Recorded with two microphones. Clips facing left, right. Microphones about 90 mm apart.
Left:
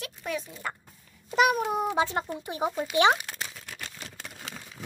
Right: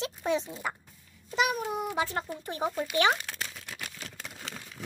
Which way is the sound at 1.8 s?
30° left (ahead or behind).